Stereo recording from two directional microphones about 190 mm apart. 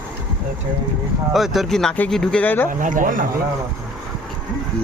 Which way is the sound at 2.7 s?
45° right (ahead or behind).